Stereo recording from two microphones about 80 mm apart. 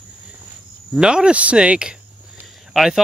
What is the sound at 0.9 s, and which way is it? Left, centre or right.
Speech, centre.